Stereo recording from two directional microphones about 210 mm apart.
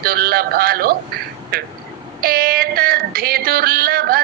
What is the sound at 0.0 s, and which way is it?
Female singing, 45° right (ahead or behind).